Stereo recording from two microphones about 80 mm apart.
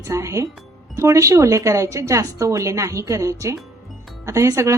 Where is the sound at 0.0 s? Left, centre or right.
Right.